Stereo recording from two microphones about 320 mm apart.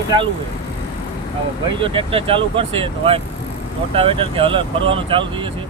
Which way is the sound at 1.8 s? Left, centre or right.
Centre.